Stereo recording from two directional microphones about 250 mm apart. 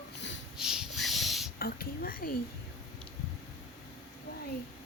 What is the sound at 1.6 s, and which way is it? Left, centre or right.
Speech, left.